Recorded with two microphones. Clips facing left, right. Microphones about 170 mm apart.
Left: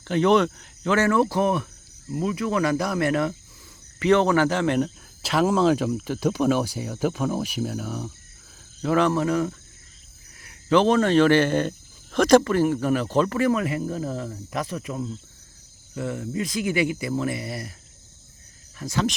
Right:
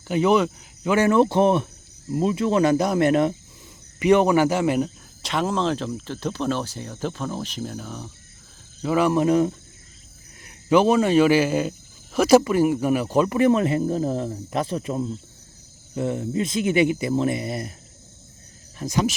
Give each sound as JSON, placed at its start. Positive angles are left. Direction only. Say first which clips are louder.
{"t": 0.1, "sound": "speech", "louder": "even", "side_deg": -5}
{"t": 5.2, "sound": "speech", "louder": "left 4 dB", "side_deg": 5}
{"t": 9.1, "sound": "speech", "louder": "right 4 dB", "side_deg": -20}
{"t": 10.4, "sound": "speech", "louder": "right 1 dB", "side_deg": -10}
{"t": 18.8, "sound": "speech", "louder": "right 3 dB", "side_deg": -20}